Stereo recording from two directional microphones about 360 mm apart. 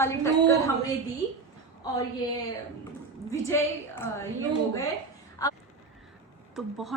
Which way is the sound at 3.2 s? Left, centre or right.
Centre.